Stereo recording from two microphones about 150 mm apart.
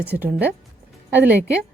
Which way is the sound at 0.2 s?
10° right (ahead or behind).